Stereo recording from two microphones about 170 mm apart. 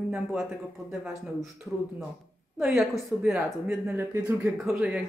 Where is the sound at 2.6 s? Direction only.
Centre (ahead or behind).